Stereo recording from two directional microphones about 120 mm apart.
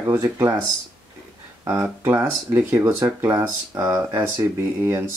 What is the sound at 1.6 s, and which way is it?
Speech, 25° right (ahead or behind).